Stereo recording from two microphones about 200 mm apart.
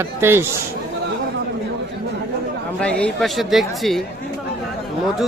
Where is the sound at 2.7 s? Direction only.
5° left (ahead or behind).